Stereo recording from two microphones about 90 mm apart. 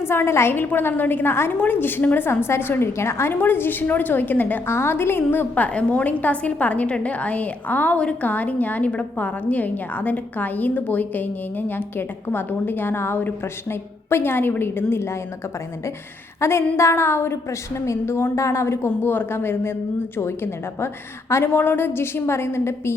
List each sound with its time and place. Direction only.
0.0 s a woman's voice: 25° left (ahead or behind)
16.4 s a woman's voice: 30° left (ahead or behind)